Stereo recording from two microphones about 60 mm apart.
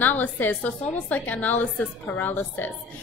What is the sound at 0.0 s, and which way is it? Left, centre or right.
A woman's voice, left.